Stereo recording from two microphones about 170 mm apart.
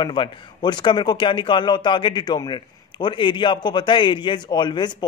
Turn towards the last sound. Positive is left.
turn(degrees=25)  # may be behind; listen again after turning